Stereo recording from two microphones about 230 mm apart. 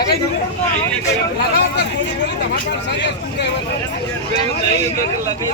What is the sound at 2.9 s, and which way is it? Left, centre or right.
Speech, left.